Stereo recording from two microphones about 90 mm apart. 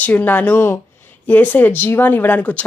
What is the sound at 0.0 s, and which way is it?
Speech, 20° left (ahead or behind).